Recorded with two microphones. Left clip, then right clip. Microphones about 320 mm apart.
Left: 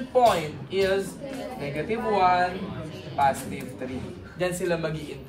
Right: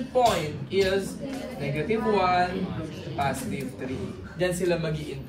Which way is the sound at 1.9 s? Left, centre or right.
Centre.